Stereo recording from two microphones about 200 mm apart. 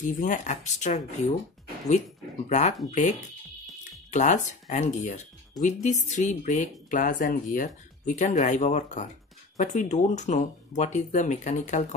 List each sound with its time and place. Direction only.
0.0 s speech: 40° left (ahead or behind)
2.9 s speech: 35° left (ahead or behind)